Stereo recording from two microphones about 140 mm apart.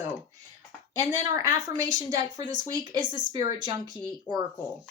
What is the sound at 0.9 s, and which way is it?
A woman's voice, 25° right (ahead or behind).